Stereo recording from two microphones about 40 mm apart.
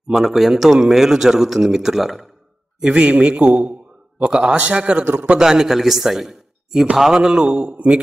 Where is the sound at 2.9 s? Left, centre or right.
Right.